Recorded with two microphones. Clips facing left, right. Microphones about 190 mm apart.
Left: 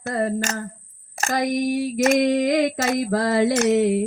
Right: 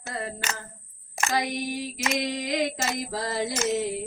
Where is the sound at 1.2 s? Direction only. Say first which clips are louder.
Left 6 dB; 45° left (ahead or behind).